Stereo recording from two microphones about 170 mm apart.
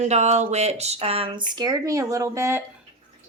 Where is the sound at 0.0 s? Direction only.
40° right (ahead or behind); by 2.6 s 15° right (ahead or behind).